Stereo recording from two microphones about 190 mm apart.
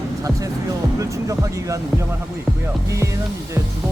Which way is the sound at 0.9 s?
15° right (ahead or behind).